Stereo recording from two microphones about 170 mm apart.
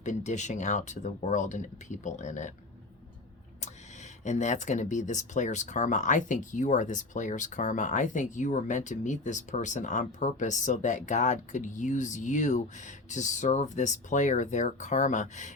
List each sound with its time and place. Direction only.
0.0 s speech: 45° left (ahead or behind)
4.2 s speech: 45° left (ahead or behind)